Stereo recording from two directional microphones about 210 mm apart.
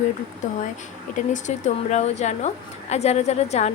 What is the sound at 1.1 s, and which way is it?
A woman's voice, 35° left (ahead or behind).